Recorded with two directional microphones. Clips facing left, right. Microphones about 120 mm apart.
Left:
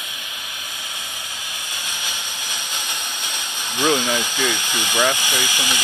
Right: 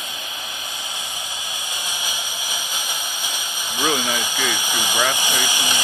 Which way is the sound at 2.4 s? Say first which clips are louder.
Even; 10° right (ahead or behind).